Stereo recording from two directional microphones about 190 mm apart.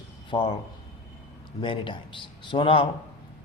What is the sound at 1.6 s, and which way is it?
Speech, 25° left (ahead or behind).